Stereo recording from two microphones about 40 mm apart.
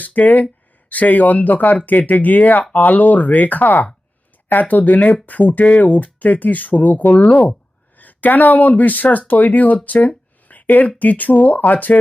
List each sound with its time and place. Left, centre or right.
0.0 s speech: left